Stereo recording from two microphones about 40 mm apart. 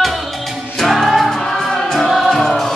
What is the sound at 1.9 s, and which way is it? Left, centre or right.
Music, centre.